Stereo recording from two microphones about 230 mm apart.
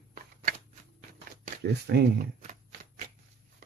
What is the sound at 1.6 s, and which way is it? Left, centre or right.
Speech, right.